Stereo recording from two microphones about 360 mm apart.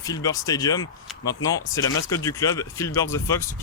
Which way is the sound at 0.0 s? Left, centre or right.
Centre.